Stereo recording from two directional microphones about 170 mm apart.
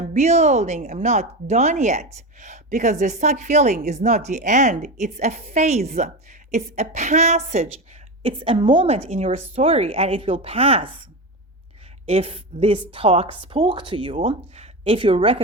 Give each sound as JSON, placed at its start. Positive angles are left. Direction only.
{"t": 0.1, "sound": "a woman's voice", "side_deg": -40}
{"t": 12.0, "sound": "a woman's voice", "side_deg": -35}